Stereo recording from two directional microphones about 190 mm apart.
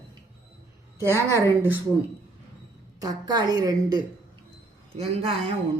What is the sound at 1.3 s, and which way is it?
Speech, 10° right (ahead or behind).